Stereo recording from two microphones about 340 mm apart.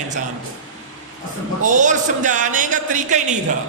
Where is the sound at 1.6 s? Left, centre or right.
Right.